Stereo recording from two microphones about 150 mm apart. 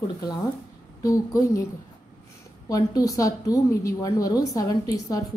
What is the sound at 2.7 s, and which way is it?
A woman's voice, 25° left (ahead or behind).